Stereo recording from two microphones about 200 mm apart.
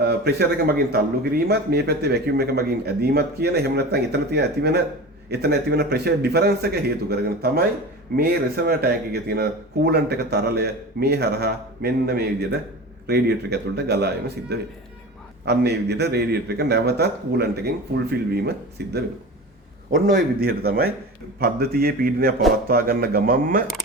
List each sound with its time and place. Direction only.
0.0 s a man's voice: 55° right (ahead or behind)
19.9 s speech: 45° right (ahead or behind)